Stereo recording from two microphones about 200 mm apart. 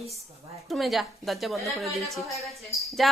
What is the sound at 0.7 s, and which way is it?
A woman's voice, centre (ahead or behind).